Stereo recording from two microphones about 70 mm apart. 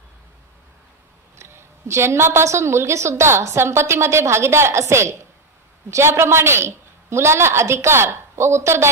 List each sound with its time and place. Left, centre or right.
1.4 s a woman's voice: right